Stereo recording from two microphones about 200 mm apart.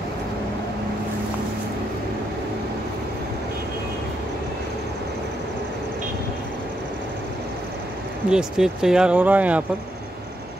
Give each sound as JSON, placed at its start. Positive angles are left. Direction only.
{"t": 8.3, "sound": "speech", "side_deg": -5}